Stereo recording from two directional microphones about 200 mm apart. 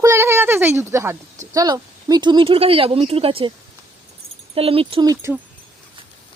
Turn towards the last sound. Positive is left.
turn(degrees=-15)  # may be behind; listen again after turning